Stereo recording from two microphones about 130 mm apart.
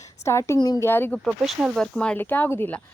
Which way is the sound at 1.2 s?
Centre (ahead or behind).